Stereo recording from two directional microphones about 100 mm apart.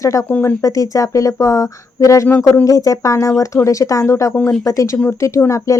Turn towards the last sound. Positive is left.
turn(degrees=30)  # may be behind; listen again after turning